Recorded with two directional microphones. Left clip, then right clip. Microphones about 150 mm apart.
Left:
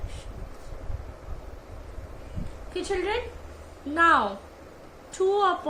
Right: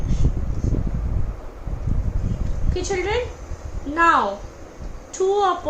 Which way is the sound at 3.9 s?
40° left (ahead or behind).